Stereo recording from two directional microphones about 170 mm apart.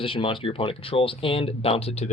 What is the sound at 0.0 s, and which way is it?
Speech, 30° left (ahead or behind).